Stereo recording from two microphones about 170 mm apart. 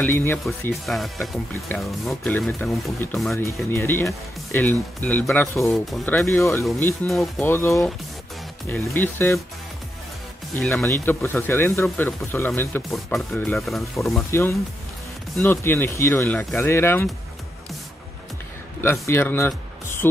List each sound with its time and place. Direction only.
0.0 s speech: 15° left (ahead or behind)
0.5 s speech: centre (ahead or behind)
7.1 s speech: centre (ahead or behind)
7.4 s speech: 15° left (ahead or behind)
10.5 s speech: 15° left (ahead or behind)
13.6 s speech: centre (ahead or behind)
14.3 s speech: 15° left (ahead or behind)
18.8 s speech: 15° left (ahead or behind)